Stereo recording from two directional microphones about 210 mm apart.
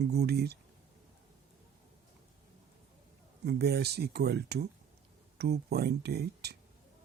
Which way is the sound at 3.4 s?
50° right (ahead or behind).